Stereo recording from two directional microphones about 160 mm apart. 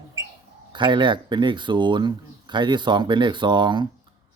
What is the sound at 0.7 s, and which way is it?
Speech, 30° right (ahead or behind).